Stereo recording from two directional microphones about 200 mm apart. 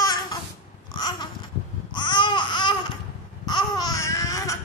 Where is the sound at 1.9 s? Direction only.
25° left (ahead or behind).